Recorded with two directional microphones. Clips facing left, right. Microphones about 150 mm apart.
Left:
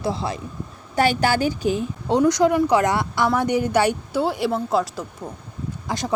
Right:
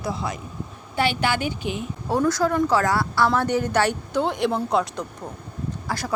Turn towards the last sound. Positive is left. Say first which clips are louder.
# left 3 dB
turn(degrees=20)  # may be behind; listen again after turning